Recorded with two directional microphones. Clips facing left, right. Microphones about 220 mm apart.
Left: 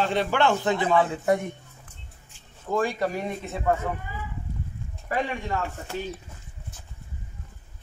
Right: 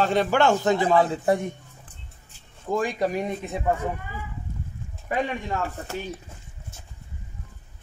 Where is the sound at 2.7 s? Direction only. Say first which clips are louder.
Right 1 dB; 15° right (ahead or behind).